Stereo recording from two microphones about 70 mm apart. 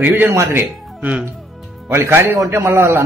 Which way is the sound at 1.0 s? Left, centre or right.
Centre.